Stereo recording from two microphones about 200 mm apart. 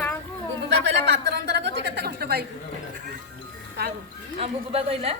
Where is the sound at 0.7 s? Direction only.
55° right (ahead or behind).